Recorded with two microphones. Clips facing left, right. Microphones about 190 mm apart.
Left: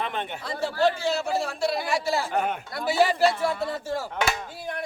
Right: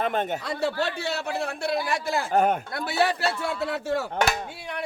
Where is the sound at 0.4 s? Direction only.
65° right (ahead or behind); by 2.8 s 45° right (ahead or behind).